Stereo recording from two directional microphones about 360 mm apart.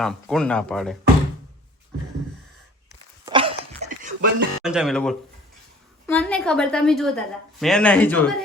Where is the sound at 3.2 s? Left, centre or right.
Centre.